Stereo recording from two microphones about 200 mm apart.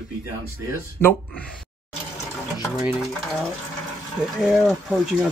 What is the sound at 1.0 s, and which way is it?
Speech, 10° left (ahead or behind).